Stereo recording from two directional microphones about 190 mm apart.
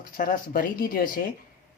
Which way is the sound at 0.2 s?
45° left (ahead or behind).